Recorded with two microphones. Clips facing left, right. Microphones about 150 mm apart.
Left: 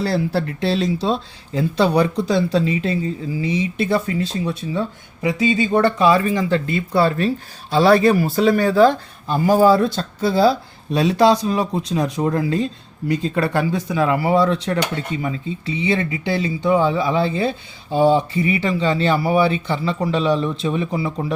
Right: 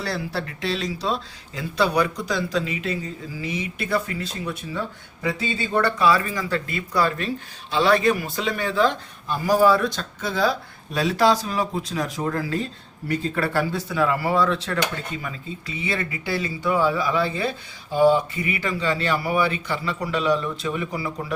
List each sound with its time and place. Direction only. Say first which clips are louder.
0.0 s speech: left 8 dB; 30° left (ahead or behind)